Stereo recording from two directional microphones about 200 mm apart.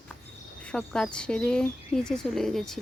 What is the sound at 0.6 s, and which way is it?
Speech, 5° left (ahead or behind).